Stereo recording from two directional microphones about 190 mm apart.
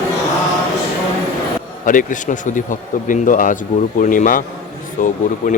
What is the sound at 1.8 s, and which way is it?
Speech, 45° left (ahead or behind).